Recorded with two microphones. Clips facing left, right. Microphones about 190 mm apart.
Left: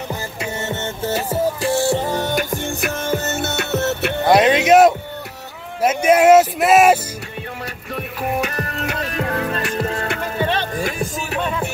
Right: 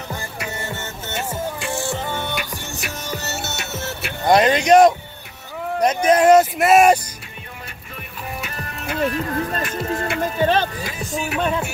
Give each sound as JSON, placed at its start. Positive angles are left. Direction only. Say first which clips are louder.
{"t": 0.4, "sound": "music", "louder": "left 6 dB", "side_deg": 25}
{"t": 4.3, "sound": "speech", "louder": "left 1 dB", "side_deg": 0}
{"t": 7.9, "sound": "music", "louder": "left 10 dB", "side_deg": 75}
{"t": 10.4, "sound": "music", "louder": "right 3 dB", "side_deg": -40}
{"t": 10.8, "sound": "music", "louder": "left 7 dB", "side_deg": 50}